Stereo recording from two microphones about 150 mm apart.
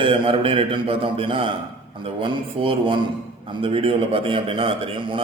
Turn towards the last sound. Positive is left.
turn(degrees=-35)  # may be behind; listen again after turning